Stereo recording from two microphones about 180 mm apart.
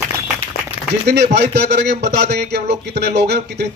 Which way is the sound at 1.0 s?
65° right (ahead or behind).